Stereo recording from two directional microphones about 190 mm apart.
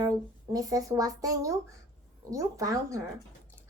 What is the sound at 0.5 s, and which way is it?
Speech, 20° right (ahead or behind).